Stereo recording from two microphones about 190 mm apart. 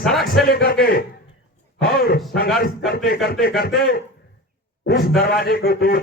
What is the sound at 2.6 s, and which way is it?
A man's voice, 55° left (ahead or behind).